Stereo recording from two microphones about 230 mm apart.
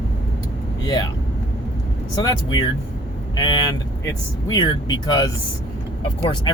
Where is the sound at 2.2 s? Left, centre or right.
Centre.